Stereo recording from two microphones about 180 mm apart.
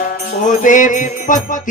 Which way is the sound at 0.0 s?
45° left (ahead or behind).